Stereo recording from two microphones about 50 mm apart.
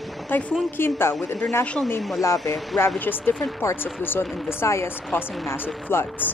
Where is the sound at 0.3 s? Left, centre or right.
Left.